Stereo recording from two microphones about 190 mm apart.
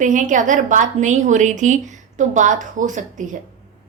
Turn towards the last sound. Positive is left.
turn(degrees=-40)  # may be behind; listen again after turning